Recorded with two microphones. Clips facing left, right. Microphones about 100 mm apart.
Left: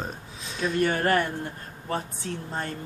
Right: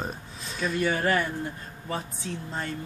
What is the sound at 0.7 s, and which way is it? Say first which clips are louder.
Speech: left 2 dB; 50° left (ahead or behind).